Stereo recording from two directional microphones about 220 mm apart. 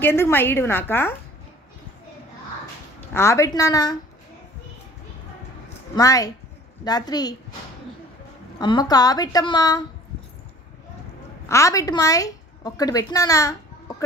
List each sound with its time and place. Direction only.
0.0 s a woman's voice: 10° left (ahead or behind)
3.1 s a woman's voice: 10° left (ahead or behind)
5.9 s a woman's voice: 15° left (ahead or behind)
8.5 s a woman's voice: 20° left (ahead or behind)
11.4 s a woman's voice: 15° left (ahead or behind)